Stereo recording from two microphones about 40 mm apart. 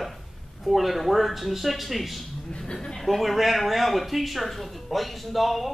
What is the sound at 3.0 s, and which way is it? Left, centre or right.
Speech, centre.